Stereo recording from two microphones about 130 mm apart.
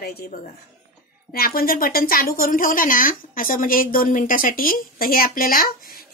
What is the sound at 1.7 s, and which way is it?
A woman's voice, 90° left.